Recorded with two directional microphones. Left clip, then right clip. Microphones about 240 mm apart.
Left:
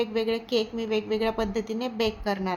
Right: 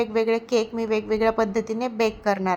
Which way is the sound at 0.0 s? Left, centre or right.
Right.